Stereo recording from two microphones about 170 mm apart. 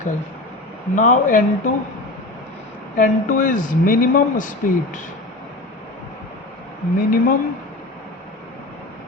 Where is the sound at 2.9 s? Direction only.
50° left (ahead or behind).